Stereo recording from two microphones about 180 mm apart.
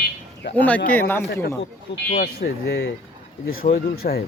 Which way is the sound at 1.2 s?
60° left (ahead or behind).